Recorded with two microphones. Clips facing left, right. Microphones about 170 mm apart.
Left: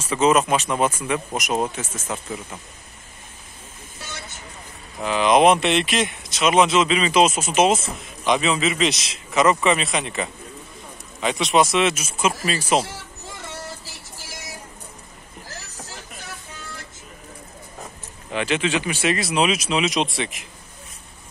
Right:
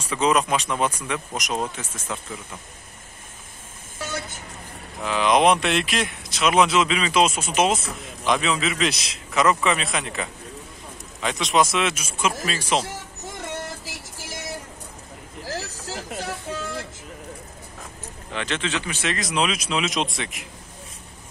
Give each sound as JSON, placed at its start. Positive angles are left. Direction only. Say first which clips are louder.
{"t": 0.0, "sound": "speech", "louder": "left 3 dB", "side_deg": 0}
{"t": 5.0, "sound": "speech", "louder": "left 3 dB", "side_deg": 0}
{"t": 15.4, "sound": "a sound", "louder": "right 9 dB", "side_deg": -90}
{"t": 18.3, "sound": "speech", "louder": "left 5 dB", "side_deg": 10}